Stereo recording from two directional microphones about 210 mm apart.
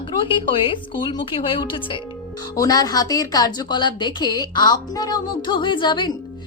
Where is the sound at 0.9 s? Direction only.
25° left (ahead or behind).